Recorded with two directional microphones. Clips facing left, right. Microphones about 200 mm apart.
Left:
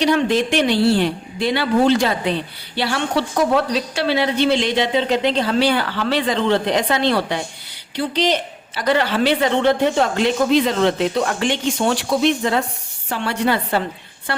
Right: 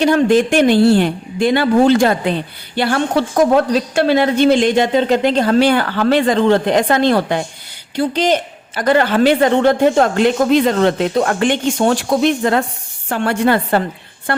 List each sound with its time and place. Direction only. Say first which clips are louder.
0.0 s a woman's voice: right 5 dB; 50° right (ahead or behind)